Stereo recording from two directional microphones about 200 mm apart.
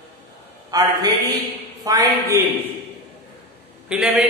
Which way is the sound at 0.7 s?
20° right (ahead or behind).